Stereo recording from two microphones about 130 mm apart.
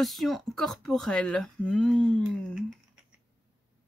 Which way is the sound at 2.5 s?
5° right (ahead or behind).